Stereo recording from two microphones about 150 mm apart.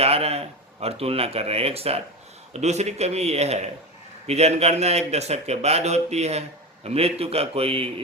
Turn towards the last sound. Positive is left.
turn(degrees=-40)  # may be behind; listen again after turning